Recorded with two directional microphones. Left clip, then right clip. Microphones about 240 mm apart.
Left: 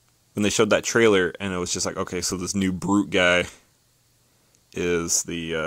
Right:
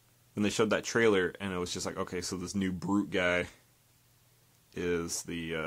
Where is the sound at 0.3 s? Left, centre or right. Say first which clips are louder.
Left 9 dB; left.